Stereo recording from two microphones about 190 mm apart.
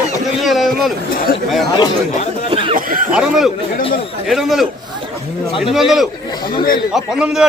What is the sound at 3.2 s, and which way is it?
A man's voice, centre (ahead or behind).